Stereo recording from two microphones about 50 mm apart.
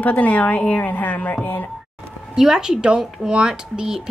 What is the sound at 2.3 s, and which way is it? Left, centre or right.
Speech, centre.